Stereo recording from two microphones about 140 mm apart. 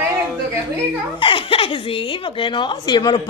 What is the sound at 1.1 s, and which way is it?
Speech, 40° left (ahead or behind).